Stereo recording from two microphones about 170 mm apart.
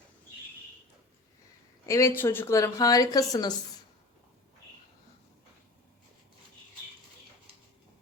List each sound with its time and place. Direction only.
1.9 s a woman's voice: 15° left (ahead or behind)